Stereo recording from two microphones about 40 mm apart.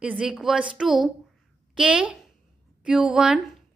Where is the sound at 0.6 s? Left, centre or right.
Right.